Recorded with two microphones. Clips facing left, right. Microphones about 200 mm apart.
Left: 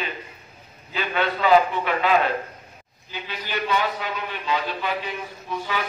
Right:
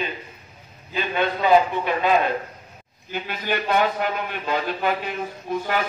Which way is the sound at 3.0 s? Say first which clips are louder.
Right 7 dB; 50° right (ahead or behind).